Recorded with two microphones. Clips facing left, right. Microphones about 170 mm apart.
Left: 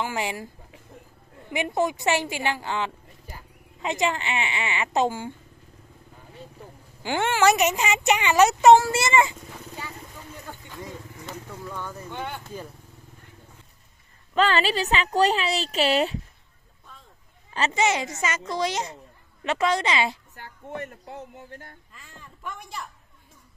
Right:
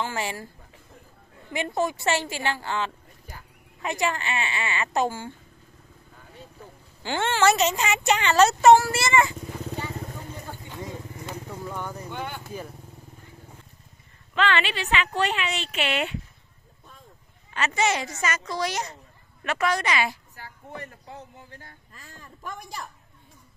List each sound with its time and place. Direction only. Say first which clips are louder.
0.0 s speech: left 1 dB; 15° left (ahead or behind)
1.5 s speech: left 2 dB; 15° left (ahead or behind)
7.0 s speech: left 1 dB; 15° left (ahead or behind)
10.7 s vehicle: right 3 dB; 20° right (ahead or behind)
14.3 s a woman's voice: left 3 dB; 40° left (ahead or behind)
17.7 s speech: left 1 dB; 20° left (ahead or behind)
21.5 s speech: left 4 dB; 55° left (ahead or behind)
21.9 s a man's voice: right 1 dB; 40° right (ahead or behind)